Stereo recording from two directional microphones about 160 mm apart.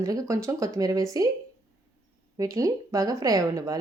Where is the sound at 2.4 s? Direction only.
20° right (ahead or behind).